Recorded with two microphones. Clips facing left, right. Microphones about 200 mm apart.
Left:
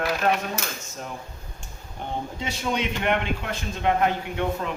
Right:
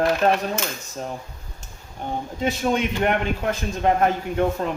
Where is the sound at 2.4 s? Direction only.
50° right (ahead or behind).